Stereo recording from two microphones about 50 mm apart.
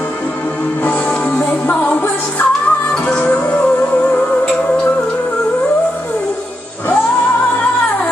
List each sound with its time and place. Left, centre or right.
1.4 s music: left